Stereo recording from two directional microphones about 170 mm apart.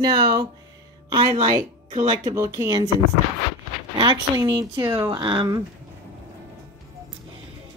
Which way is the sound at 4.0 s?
30° right (ahead or behind).